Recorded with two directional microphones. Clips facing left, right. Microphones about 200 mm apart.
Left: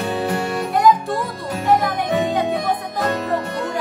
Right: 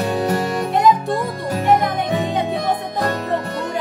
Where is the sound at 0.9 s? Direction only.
25° right (ahead or behind).